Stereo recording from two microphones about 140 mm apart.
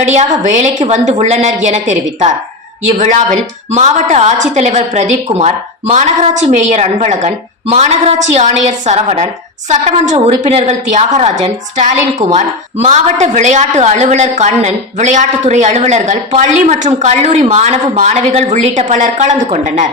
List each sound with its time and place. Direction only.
0.0 s a woman's voice: 55° right (ahead or behind)